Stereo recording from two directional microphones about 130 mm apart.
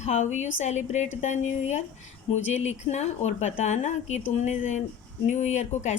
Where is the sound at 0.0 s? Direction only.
65° left (ahead or behind).